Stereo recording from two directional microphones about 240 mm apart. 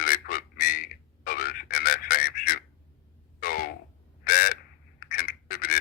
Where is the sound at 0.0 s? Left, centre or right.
Left.